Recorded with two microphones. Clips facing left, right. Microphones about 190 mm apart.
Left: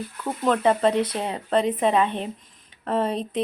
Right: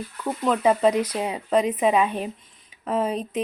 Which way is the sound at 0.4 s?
5° right (ahead or behind).